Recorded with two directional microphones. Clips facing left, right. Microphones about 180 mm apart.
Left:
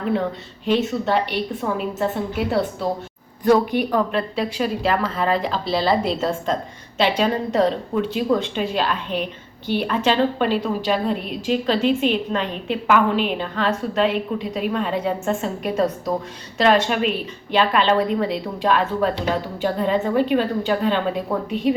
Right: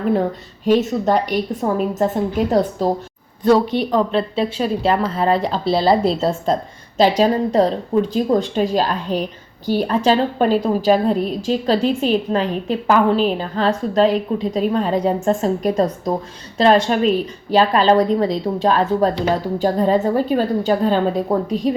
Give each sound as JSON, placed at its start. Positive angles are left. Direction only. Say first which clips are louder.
{"t": 0.6, "sound": "a woman's voice", "louder": "right 4 dB", "side_deg": -45}
{"t": 3.7, "sound": "a woman's voice", "louder": "right 2 dB", "side_deg": -20}